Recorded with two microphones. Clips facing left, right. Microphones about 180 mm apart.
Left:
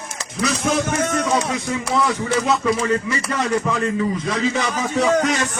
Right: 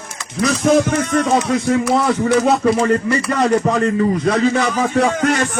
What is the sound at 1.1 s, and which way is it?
A man's voice, 55° right (ahead or behind).